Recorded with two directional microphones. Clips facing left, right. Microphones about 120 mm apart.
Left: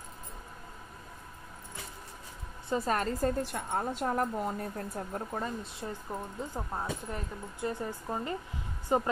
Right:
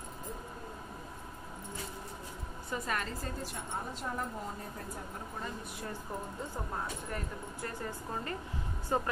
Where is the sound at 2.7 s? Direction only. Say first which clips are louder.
Left 7 dB; 35° left (ahead or behind); by 4.5 s 60° left (ahead or behind).